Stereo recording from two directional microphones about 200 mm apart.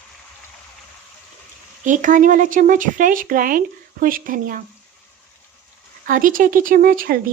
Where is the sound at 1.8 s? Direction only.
40° right (ahead or behind).